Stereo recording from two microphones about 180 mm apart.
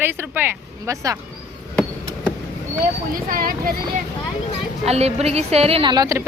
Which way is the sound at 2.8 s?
50° right (ahead or behind).